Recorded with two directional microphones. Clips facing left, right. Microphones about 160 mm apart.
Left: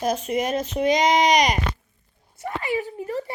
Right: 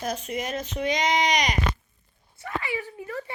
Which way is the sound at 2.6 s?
45° left (ahead or behind).